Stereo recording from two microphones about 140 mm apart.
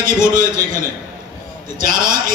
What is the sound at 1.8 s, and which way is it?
Speech, 80° right.